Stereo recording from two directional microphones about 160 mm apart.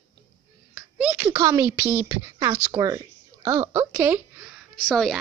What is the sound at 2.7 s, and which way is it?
Speech, 40° right (ahead or behind).